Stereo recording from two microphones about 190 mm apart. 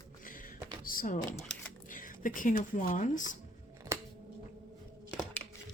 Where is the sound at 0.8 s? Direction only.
50° left (ahead or behind).